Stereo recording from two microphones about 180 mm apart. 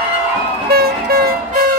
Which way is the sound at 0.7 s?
60° right (ahead or behind).